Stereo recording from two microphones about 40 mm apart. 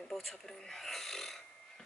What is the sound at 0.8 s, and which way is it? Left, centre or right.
Burping, centre.